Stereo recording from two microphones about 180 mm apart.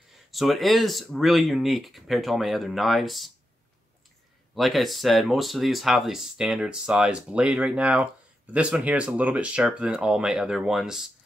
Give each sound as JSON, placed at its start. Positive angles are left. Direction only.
{"t": 0.3, "sound": "speech", "side_deg": 0}
{"t": 4.6, "sound": "speech", "side_deg": 0}